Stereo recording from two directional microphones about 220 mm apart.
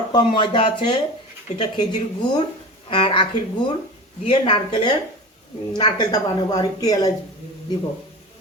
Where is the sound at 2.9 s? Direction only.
25° left (ahead or behind).